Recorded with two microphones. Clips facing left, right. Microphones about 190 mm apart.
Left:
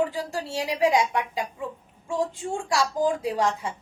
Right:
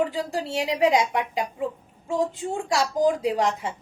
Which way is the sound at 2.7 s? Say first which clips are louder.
Right 2 dB; 20° right (ahead or behind).